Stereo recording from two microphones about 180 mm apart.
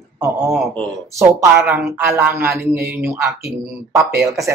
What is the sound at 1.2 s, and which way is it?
Speech, 15° right (ahead or behind).